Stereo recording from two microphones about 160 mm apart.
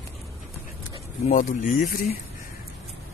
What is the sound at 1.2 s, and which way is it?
Speech, 50° left (ahead or behind).